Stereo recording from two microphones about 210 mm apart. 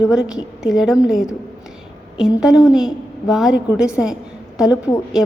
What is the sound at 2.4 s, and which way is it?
A woman's voice, 5° right (ahead or behind).